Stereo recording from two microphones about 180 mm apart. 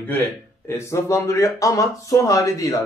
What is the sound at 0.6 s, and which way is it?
A man's voice, 15° left (ahead or behind).